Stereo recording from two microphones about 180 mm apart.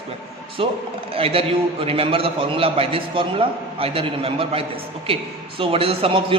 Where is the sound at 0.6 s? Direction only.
30° right (ahead or behind).